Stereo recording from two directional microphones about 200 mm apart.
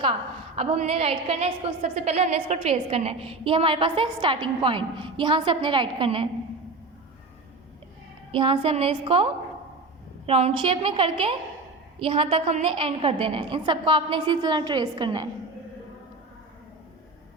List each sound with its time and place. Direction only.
0.0 s a woman's voice: 25° right (ahead or behind)
8.3 s a woman's voice: 25° right (ahead or behind)